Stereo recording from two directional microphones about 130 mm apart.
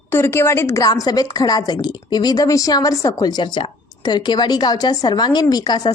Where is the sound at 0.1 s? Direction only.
20° left (ahead or behind).